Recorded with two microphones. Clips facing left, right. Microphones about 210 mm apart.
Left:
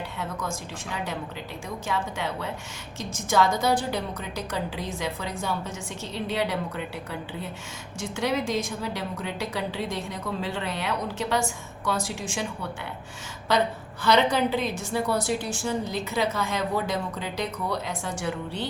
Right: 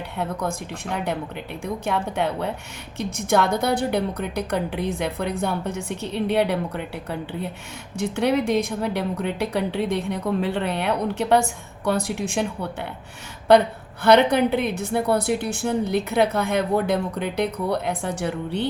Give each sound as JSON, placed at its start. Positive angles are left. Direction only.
{"t": 0.2, "sound": "a woman's voice", "side_deg": -60}